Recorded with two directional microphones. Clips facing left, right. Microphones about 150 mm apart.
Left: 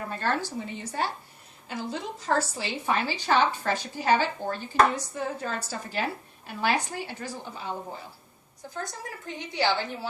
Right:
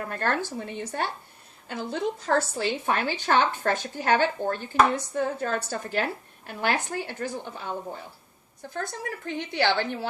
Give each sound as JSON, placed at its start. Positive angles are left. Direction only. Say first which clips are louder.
{"t": 0.1, "sound": "a woman's voice", "louder": "even", "side_deg": -55}
{"t": 8.7, "sound": "a woman's voice", "louder": "right 4 dB", "side_deg": -60}